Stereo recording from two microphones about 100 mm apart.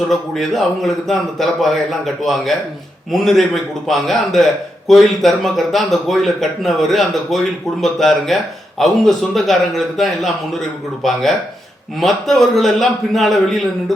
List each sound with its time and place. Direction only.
0.1 s speech: centre (ahead or behind)